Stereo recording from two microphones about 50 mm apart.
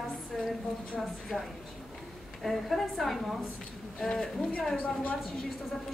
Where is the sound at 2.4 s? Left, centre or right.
Centre.